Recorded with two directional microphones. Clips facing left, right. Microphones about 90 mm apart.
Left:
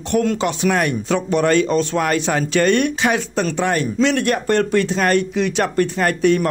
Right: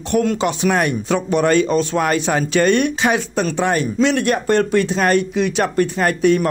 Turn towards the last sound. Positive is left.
turn(degrees=-15)  # may be behind; listen again after turning